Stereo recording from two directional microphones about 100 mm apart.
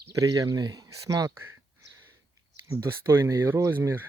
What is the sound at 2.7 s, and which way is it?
Speech, 25° right (ahead or behind).